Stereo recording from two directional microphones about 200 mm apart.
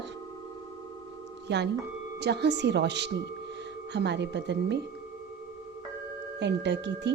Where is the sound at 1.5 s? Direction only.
60° right (ahead or behind).